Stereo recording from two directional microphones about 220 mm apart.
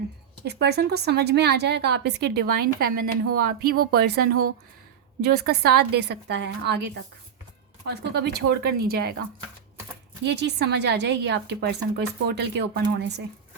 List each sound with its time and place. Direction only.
0.4 s a woman's voice: 50° right (ahead or behind)
10.2 s a woman's voice: 50° right (ahead or behind)